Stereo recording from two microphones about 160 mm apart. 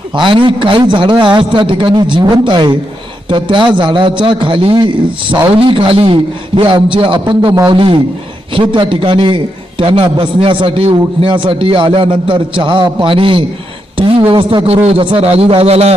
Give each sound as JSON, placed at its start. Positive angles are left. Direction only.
{"t": 0.2, "sound": "a man's voice", "side_deg": -30}